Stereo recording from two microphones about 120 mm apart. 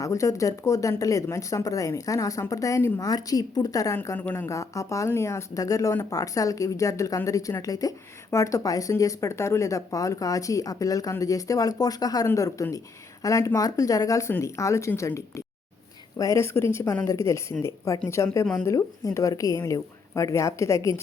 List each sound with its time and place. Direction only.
0.0 s a woman's voice: 25° left (ahead or behind)